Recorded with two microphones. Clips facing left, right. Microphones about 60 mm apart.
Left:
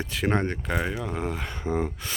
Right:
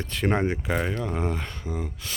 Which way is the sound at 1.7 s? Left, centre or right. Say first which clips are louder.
Left 7 dB; left.